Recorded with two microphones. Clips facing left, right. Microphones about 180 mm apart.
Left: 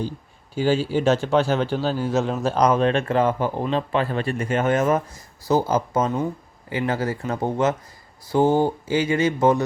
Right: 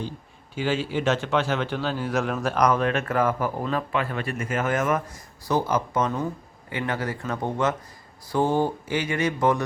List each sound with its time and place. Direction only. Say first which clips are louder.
0.5 s a man's voice: left 5 dB; 35° left (ahead or behind)